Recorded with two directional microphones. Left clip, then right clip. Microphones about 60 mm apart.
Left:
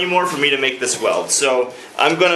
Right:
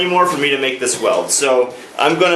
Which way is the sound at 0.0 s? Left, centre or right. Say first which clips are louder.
Right 2 dB; centre.